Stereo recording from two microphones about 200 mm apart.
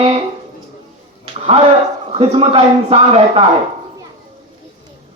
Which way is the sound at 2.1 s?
30° right (ahead or behind).